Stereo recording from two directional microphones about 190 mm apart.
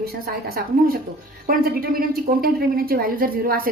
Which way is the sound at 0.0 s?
55° right (ahead or behind).